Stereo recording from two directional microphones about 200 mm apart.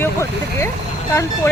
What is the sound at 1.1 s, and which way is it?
Speech, 10° left (ahead or behind).